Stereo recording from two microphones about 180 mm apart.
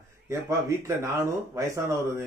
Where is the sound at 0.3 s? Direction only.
15° right (ahead or behind).